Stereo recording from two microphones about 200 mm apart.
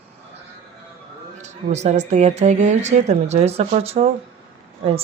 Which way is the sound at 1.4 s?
35° right (ahead or behind).